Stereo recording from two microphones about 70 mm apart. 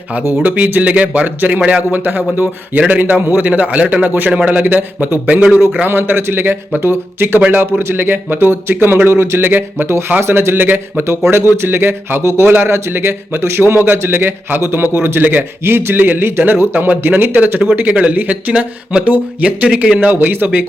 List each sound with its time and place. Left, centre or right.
0.4 s a man's voice: right
5.8 s a man's voice: right
9.5 s a man's voice: right